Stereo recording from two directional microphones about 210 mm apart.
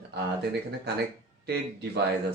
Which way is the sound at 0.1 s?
50° right (ahead or behind).